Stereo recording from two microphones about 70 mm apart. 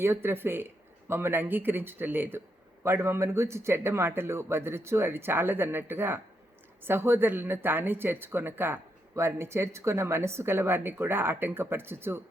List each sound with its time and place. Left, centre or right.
0.0 s speech: right